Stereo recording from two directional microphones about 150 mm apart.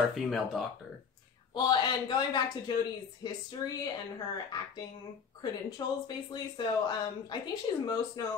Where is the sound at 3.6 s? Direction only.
20° left (ahead or behind).